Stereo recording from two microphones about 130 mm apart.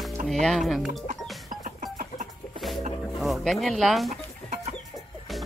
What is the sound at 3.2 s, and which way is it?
Speech, centre (ahead or behind).